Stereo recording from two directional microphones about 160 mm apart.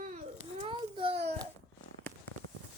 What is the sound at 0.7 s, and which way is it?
Speech, 30° right (ahead or behind).